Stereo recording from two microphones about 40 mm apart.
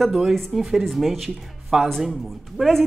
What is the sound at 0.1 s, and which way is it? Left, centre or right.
A woman's voice, centre.